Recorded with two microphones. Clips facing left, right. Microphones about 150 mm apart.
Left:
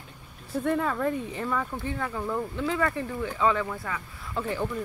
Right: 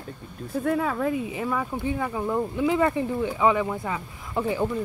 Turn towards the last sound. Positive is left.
turn(degrees=-15)  # may be behind; listen again after turning